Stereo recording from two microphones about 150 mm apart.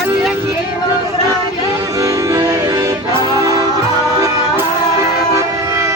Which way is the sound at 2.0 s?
20° right (ahead or behind).